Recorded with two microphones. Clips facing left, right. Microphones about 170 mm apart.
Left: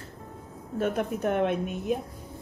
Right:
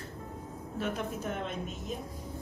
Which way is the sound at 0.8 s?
55° left (ahead or behind).